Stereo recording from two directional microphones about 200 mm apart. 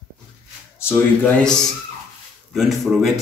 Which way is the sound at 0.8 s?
10° left (ahead or behind).